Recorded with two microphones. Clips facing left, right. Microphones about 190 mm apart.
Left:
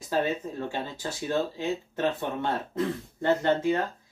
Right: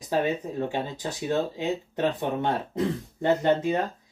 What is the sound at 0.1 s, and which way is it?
Speech, 15° right (ahead or behind).